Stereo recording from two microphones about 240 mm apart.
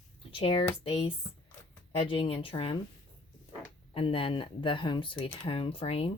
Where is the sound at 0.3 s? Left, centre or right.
Left.